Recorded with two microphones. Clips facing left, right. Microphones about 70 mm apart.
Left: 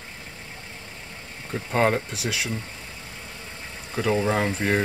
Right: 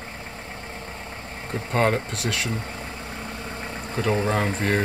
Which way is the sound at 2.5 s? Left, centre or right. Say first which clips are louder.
Right 3 dB; right.